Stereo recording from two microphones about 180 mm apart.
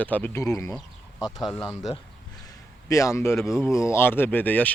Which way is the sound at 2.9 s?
15° left (ahead or behind).